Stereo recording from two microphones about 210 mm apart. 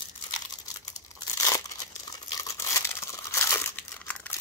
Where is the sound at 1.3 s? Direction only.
15° left (ahead or behind).